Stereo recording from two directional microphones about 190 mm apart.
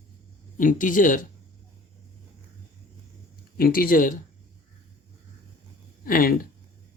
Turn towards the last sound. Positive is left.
turn(degrees=50)  # may be behind; listen again after turning